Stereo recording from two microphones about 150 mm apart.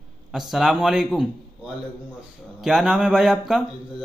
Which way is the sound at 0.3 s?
5° right (ahead or behind).